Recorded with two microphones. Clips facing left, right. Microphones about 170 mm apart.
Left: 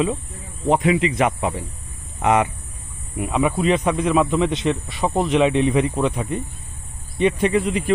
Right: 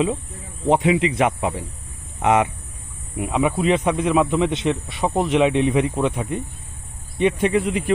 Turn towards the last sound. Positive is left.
turn(degrees=-10)  # may be behind; listen again after turning